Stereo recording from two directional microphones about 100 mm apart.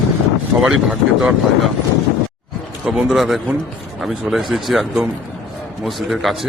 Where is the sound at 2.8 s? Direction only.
Centre (ahead or behind).